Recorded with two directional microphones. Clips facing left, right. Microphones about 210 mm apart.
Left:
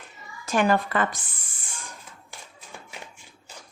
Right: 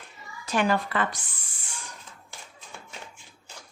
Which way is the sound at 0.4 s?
50° left (ahead or behind).